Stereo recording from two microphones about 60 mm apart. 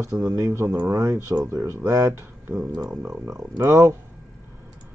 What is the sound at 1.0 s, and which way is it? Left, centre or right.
Speech, right.